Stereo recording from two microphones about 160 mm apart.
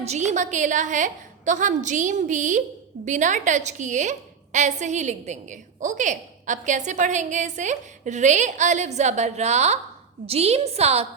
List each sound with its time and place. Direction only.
0.0 s a woman's voice: 45° right (ahead or behind)